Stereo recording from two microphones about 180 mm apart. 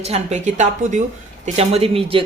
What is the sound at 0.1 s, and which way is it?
Speech, 40° right (ahead or behind).